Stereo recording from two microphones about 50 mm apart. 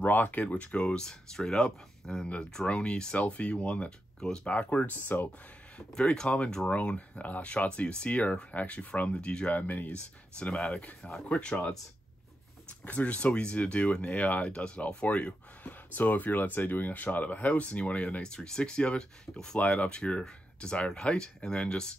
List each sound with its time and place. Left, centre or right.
0.0 s speech: left
5.8 s speech: centre
9.5 s speech: left
10.4 s speech: centre
11.0 s speech: centre
11.2 s speech: left
12.6 s speech: left
14.5 s speech: left
18.2 s speech: centre
19.6 s speech: left